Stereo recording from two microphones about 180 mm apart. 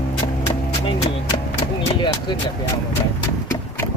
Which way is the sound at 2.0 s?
25° left (ahead or behind).